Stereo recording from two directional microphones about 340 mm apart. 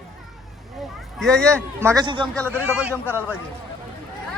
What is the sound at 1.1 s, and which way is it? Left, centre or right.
A man's voice, centre.